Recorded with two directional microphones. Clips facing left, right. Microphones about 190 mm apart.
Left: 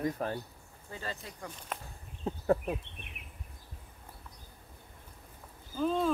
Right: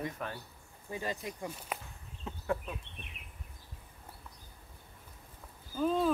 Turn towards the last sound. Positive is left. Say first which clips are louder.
# even
turn(degrees=-5)  # may be behind; listen again after turning